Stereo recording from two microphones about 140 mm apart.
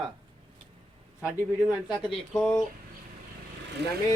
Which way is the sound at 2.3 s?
5° left (ahead or behind).